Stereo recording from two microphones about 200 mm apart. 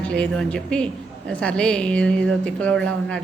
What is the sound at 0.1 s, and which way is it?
A woman's voice, 5° left (ahead or behind).